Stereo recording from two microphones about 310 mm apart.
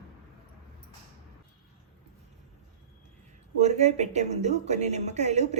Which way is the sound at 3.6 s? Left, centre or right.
Right.